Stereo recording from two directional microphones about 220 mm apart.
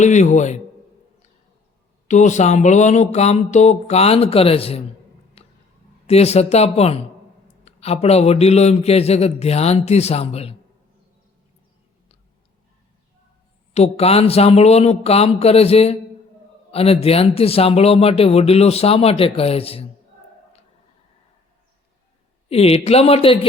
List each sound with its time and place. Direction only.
0.0 s speech: 35° left (ahead or behind)
2.0 s speech: 35° left (ahead or behind)
5.4 s a sound: 25° left (ahead or behind)
6.1 s speech: 30° left (ahead or behind)
13.7 s speech: 30° left (ahead or behind)
22.4 s speech: 25° left (ahead or behind)